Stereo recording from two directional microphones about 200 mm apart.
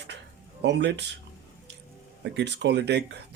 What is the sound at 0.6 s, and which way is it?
Speech, 60° right (ahead or behind).